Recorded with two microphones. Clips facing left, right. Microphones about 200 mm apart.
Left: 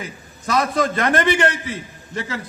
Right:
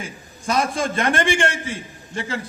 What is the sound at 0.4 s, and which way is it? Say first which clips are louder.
A man's voice: left 2 dB; 25° right (ahead or behind).